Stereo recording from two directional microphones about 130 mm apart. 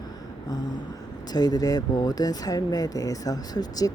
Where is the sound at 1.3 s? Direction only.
30° left (ahead or behind).